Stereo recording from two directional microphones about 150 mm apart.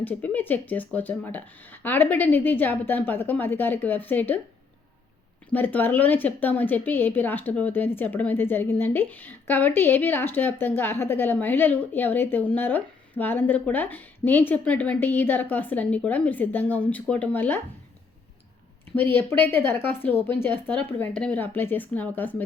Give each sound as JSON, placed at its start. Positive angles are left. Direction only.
{"t": 0.0, "sound": "a woman's voice", "side_deg": 10}
{"t": 5.5, "sound": "a woman's voice", "side_deg": 10}
{"t": 18.9, "sound": "a woman's voice", "side_deg": 15}